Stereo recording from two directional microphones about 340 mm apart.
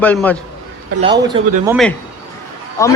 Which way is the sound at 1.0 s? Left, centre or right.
Centre.